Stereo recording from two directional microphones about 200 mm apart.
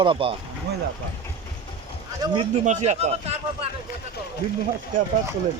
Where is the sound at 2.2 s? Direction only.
25° right (ahead or behind).